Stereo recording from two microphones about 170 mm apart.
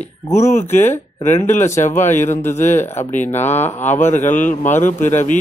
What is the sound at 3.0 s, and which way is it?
Speech, 45° left (ahead or behind).